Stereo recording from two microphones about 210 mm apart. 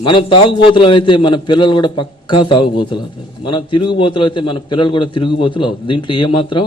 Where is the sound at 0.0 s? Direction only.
25° left (ahead or behind).